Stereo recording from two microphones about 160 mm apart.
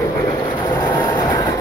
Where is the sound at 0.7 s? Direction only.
25° left (ahead or behind).